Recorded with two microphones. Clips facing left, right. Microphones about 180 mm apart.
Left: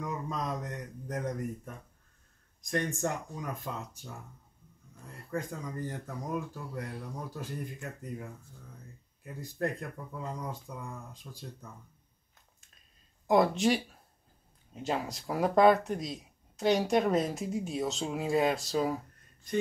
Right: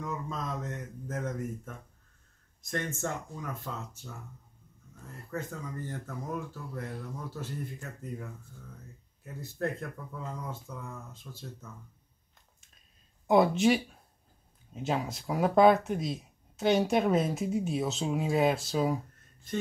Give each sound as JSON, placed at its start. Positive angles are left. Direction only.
{"t": 0.0, "sound": "a sound", "side_deg": 15}
{"t": 1.0, "sound": "speech", "side_deg": 15}
{"t": 5.3, "sound": "speech", "side_deg": 15}
{"t": 7.3, "sound": "speech", "side_deg": 15}
{"t": 9.2, "sound": "speech", "side_deg": 15}
{"t": 13.3, "sound": "speech", "side_deg": 0}